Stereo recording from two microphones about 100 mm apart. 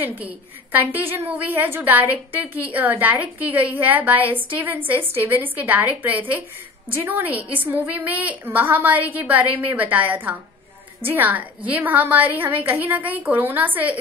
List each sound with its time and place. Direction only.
0.0 s a woman's voice: 20° right (ahead or behind)